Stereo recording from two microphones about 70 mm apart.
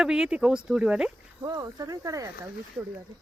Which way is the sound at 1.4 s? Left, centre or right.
Right.